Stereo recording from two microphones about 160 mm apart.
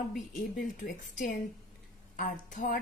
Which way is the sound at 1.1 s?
55° left (ahead or behind).